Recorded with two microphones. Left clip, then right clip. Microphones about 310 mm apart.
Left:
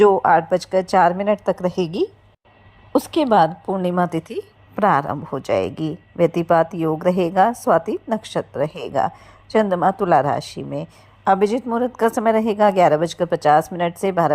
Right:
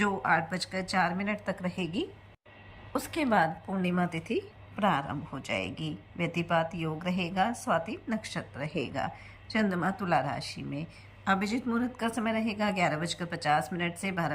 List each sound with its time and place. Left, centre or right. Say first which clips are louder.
0.0 s a woman's voice: left 14 dB; left
3.2 s a woman's voice: left 11 dB; left